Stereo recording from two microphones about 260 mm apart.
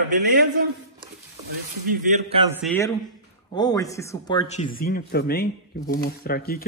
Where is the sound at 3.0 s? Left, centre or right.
Centre.